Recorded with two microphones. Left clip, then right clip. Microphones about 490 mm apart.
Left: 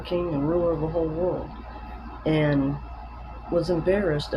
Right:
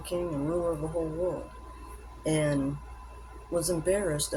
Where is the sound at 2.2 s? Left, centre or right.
Right.